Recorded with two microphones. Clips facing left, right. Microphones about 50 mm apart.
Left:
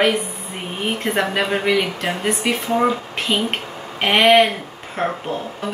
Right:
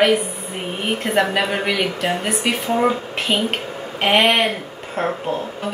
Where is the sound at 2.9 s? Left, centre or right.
Right.